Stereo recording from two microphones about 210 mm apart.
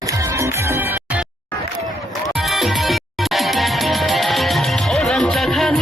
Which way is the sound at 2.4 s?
Centre (ahead or behind).